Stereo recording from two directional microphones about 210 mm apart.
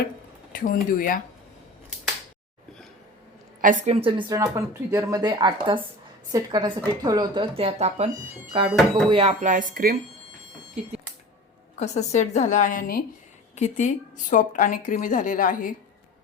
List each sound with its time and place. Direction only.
0.5 s speech: 40° left (ahead or behind)
3.6 s speech: 40° right (ahead or behind)
4.0 s speech: 20° right (ahead or behind); by 10.0 s 40° right (ahead or behind)
11.8 s speech: 35° left (ahead or behind)